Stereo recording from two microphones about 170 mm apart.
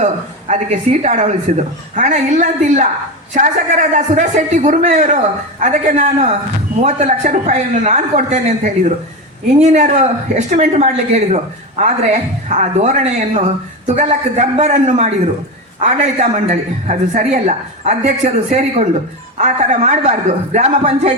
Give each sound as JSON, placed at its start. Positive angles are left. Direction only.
{"t": 0.0, "sound": "a woman's voice", "side_deg": -45}